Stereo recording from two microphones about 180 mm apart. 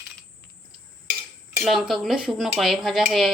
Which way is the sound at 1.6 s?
Centre (ahead or behind).